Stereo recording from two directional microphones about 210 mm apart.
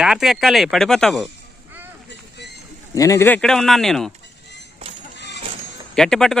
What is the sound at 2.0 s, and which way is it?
Vehicle, 50° left (ahead or behind).